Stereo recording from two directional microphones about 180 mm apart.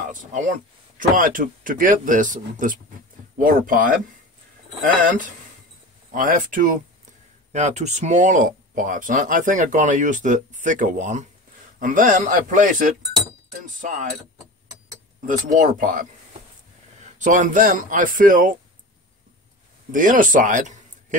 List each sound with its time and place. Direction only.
0.1 s speech: 45° right (ahead or behind)
15.2 s speech: 45° right (ahead or behind)
17.2 s speech: 45° right (ahead or behind)
19.9 s speech: 45° right (ahead or behind)